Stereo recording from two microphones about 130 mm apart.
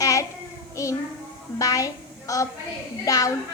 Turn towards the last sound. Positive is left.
turn(degrees=30)  # may be behind; listen again after turning